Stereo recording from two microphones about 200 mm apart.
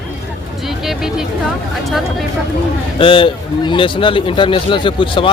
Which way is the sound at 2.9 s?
25° left (ahead or behind).